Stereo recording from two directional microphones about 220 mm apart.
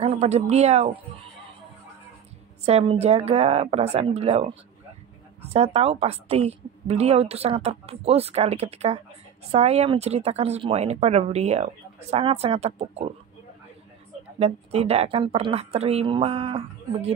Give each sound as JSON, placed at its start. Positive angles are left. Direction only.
{"t": 0.0, "sound": "a woman's voice", "side_deg": -30}
{"t": 2.6, "sound": "a woman's voice", "side_deg": -25}
{"t": 14.4, "sound": "a woman's voice", "side_deg": -30}